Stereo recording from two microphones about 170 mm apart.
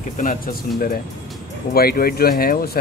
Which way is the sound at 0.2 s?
55° left (ahead or behind).